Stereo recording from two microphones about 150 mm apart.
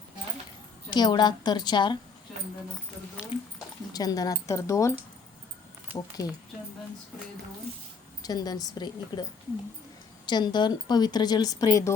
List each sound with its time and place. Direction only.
0.9 s speech: 30° left (ahead or behind)
3.9 s speech: 25° left (ahead or behind)
6.2 s speech: 25° left (ahead or behind)
8.2 s speech: 25° left (ahead or behind)
10.2 s speech: 30° left (ahead or behind)